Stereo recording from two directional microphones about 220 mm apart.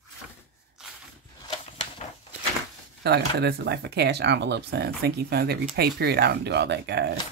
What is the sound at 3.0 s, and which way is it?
Speech, 50° right (ahead or behind).